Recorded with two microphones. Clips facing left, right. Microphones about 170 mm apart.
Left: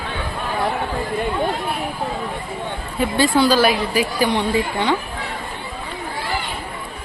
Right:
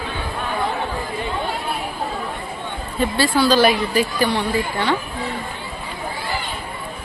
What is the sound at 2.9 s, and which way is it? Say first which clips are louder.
Speech: left 2 dB; 20° left (ahead or behind).